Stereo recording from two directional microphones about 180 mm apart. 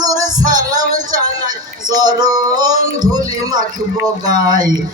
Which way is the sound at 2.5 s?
20° right (ahead or behind).